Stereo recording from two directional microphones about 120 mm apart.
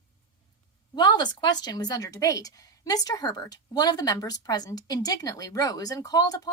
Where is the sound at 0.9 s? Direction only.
35° left (ahead or behind).